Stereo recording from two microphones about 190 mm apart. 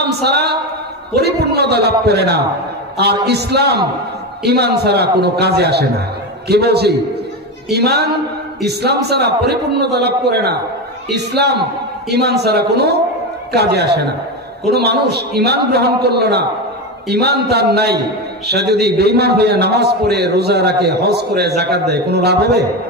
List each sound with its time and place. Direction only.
0.1 s a man's voice: 60° right (ahead or behind)